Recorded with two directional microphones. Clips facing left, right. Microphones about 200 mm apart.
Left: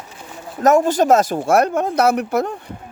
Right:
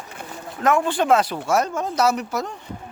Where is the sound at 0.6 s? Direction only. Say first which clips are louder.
Left 6 dB; 40° left (ahead or behind).